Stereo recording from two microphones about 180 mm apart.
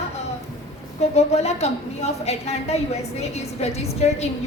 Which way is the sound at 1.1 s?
35° left (ahead or behind).